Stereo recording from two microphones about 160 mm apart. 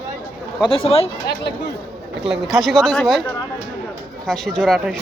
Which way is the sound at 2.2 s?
Centre (ahead or behind).